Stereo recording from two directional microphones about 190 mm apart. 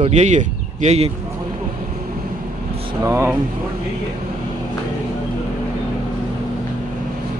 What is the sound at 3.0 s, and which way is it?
Speech, 15° right (ahead or behind).